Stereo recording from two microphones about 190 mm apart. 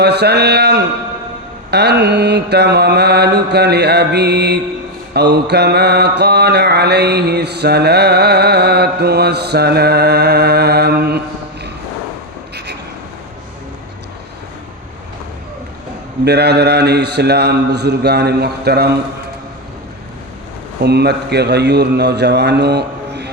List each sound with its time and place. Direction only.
0.0 s mantra: 60° right (ahead or behind)
16.2 s mantra: 60° right (ahead or behind)
20.8 s mantra: 60° right (ahead or behind)